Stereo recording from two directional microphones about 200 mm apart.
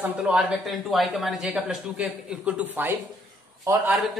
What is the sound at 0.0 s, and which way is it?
A man's voice, 5° right (ahead or behind).